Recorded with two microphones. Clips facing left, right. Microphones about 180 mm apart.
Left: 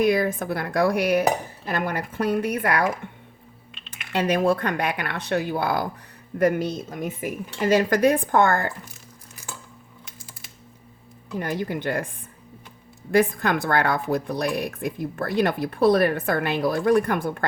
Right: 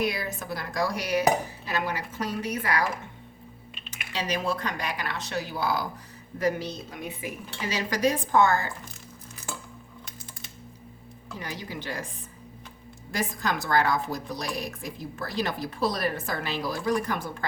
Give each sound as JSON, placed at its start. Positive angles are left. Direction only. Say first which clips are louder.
{"t": 0.0, "sound": "speech", "louder": "left 9 dB", "side_deg": 50}
{"t": 4.1, "sound": "speech", "louder": "left 8 dB", "side_deg": 55}
{"t": 11.3, "sound": "speech", "louder": "left 10 dB", "side_deg": 55}
{"t": 13.1, "sound": "speech", "louder": "left 9 dB", "side_deg": 60}